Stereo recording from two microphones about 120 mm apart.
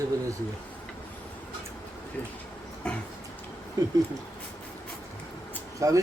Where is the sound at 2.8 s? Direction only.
10° left (ahead or behind).